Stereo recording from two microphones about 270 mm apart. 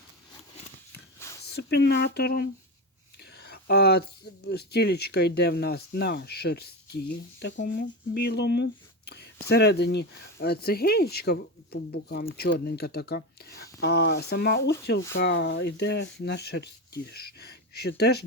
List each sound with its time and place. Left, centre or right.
1.5 s speech: left